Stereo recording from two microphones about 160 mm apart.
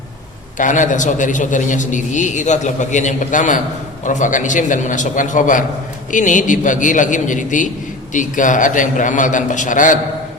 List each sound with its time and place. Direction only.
0.6 s a man's voice: 55° left (ahead or behind)